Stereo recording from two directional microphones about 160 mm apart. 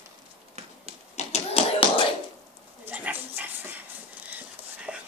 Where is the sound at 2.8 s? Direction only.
10° right (ahead or behind).